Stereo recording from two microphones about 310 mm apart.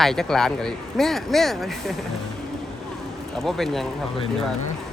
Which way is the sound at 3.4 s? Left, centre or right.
Centre.